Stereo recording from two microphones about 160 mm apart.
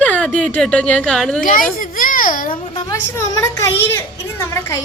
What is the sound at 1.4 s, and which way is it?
A woman's voice, 60° left (ahead or behind).